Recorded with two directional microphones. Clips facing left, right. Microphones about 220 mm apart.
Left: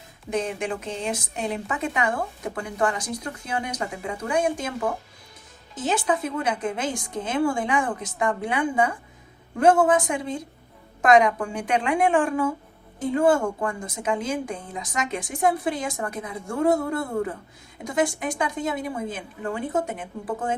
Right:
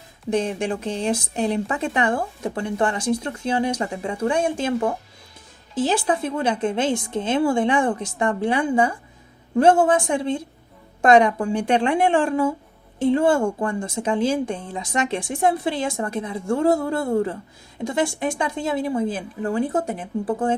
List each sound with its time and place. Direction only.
0.3 s speech: 30° right (ahead or behind)
5.7 s speech: 30° right (ahead or behind)